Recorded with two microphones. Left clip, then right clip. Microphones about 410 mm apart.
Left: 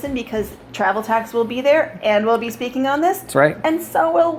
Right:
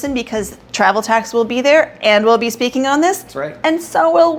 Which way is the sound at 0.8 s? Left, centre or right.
Right.